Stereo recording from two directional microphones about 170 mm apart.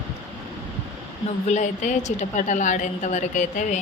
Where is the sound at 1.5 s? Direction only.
45° left (ahead or behind).